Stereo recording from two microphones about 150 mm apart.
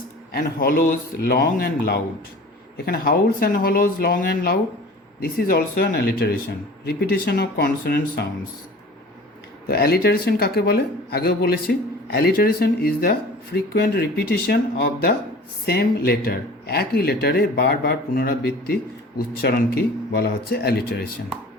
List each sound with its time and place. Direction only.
0.3 s speech: 90° left
9.6 s speech: 90° left